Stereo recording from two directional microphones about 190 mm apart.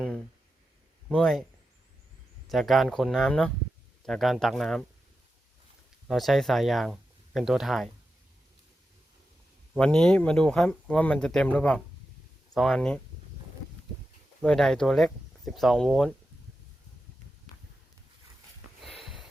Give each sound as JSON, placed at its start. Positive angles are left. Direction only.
{"t": 1.1, "sound": "speech", "side_deg": 5}
{"t": 2.5, "sound": "speech", "side_deg": 0}
{"t": 6.1, "sound": "speech", "side_deg": 0}
{"t": 9.7, "sound": "speech", "side_deg": 5}
{"t": 14.4, "sound": "speech", "side_deg": 5}